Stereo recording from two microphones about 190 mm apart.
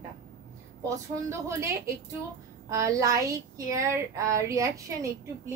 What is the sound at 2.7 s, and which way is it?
Speech, 15° right (ahead or behind).